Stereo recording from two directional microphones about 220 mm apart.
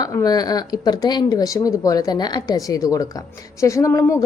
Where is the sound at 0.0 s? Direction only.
15° left (ahead or behind).